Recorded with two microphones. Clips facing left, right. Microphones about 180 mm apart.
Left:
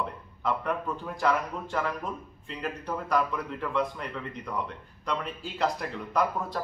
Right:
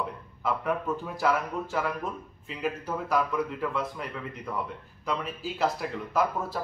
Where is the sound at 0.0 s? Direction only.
5° right (ahead or behind).